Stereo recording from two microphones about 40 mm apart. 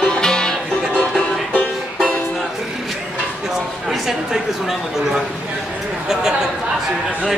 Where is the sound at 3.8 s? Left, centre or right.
Centre.